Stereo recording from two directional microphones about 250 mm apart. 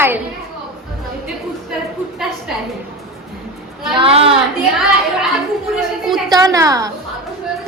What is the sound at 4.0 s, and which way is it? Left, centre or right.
Speech, right.